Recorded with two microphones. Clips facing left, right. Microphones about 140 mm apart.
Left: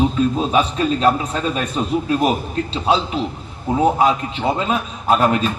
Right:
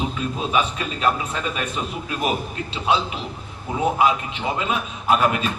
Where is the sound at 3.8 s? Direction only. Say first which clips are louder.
Left 3 dB; 35° left (ahead or behind).